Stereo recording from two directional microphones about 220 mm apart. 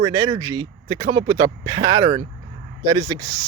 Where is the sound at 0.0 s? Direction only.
15° right (ahead or behind).